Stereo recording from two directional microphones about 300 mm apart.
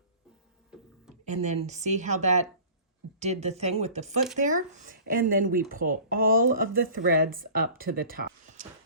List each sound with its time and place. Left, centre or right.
1.2 s speech: right